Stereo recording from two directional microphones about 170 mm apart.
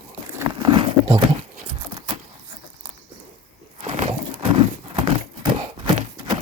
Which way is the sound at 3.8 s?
35° right (ahead or behind).